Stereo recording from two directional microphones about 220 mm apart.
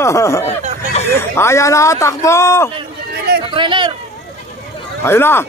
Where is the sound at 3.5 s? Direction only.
20° right (ahead or behind).